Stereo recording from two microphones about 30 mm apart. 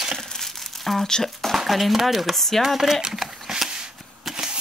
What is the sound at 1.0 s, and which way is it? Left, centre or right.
Speech, centre.